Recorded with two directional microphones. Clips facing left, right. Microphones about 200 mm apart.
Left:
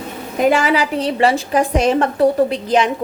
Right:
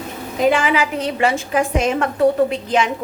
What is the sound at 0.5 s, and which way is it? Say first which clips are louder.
A woman's voice: left 2 dB; 35° left (ahead or behind).